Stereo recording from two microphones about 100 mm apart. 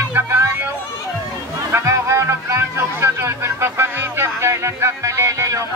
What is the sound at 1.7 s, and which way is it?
Speech, 30° right (ahead or behind).